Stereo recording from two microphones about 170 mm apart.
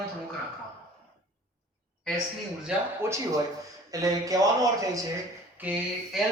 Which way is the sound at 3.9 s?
20° right (ahead or behind).